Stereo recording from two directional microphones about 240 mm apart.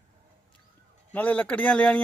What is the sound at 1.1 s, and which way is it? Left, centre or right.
Speech, centre.